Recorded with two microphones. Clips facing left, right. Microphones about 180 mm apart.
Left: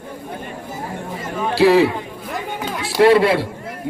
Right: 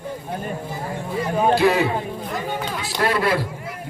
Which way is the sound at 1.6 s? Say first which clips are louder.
Left 10 dB; 30° left (ahead or behind).